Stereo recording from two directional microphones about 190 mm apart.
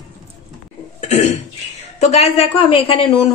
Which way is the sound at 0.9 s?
35° left (ahead or behind).